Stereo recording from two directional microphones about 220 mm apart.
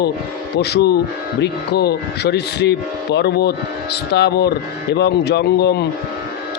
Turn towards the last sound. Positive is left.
turn(degrees=45)  # may be behind; listen again after turning